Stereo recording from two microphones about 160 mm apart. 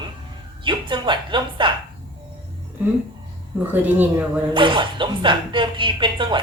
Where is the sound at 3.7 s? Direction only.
10° right (ahead or behind).